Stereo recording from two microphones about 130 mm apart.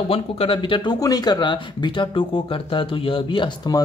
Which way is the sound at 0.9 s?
30° left (ahead or behind).